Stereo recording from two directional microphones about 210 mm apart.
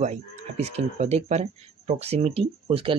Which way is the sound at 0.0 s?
30° right (ahead or behind).